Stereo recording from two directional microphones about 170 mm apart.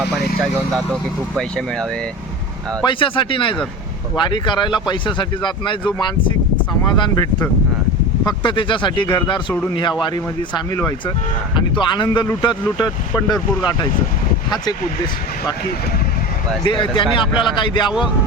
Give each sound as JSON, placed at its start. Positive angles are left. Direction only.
{"t": 1.4, "sound": "speech", "side_deg": 5}
{"t": 2.8, "sound": "speech", "side_deg": 30}
{"t": 6.8, "sound": "speech", "side_deg": 25}
{"t": 11.5, "sound": "speech", "side_deg": 25}
{"t": 16.6, "sound": "speech", "side_deg": 30}